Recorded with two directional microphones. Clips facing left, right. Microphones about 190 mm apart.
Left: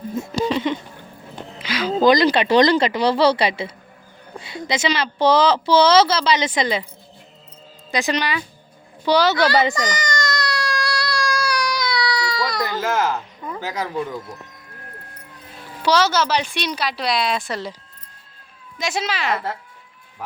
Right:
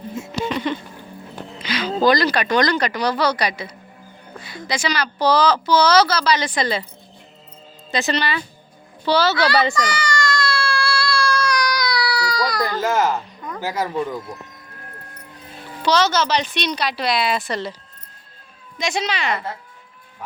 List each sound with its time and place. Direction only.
0.2 s speech: 35° left (ahead or behind)
1.6 s a sound: 5° left (ahead or behind)
2.0 s speech: 20° left (ahead or behind)
7.9 s a woman's voice: 15° left (ahead or behind)
9.0 s baby cry: 15° left (ahead or behind); by 12.6 s centre (ahead or behind)
12.8 s a sound: 15° right (ahead or behind)
15.8 s a woman's voice: 10° left (ahead or behind)
18.8 s speech: 5° left (ahead or behind)